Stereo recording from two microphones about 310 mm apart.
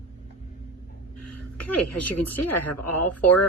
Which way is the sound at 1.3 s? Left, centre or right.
Left.